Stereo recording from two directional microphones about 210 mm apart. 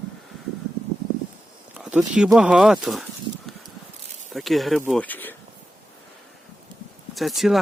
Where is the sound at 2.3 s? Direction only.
5° right (ahead or behind).